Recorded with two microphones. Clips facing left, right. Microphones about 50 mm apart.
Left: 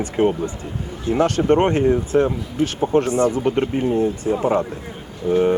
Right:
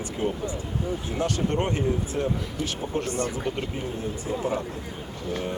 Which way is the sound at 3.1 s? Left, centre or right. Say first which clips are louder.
Left 10 dB; left.